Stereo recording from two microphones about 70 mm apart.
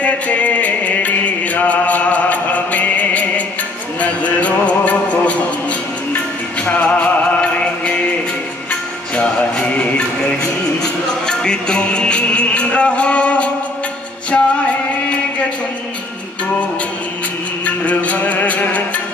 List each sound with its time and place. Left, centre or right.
0.0 s music: centre
9.1 s music: centre
17.6 s music: left